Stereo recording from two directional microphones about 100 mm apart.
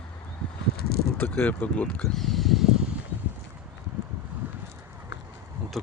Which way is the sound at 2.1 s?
Centre (ahead or behind).